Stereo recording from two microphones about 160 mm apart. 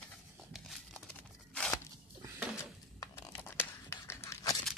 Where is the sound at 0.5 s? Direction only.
Centre (ahead or behind).